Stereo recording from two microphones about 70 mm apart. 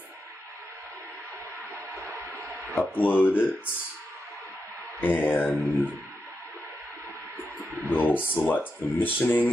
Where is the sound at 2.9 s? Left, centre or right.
Left.